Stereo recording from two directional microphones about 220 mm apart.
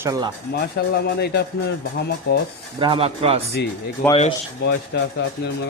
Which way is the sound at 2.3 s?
45° left (ahead or behind).